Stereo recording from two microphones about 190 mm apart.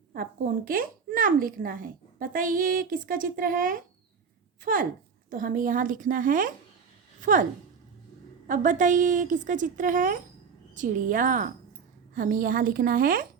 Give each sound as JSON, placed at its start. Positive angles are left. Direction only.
{"t": 0.1, "sound": "speech", "side_deg": -50}
{"t": 8.4, "sound": "speech", "side_deg": -45}